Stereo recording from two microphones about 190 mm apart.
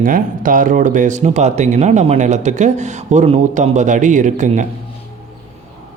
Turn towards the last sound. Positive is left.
turn(degrees=-40)  # may be behind; listen again after turning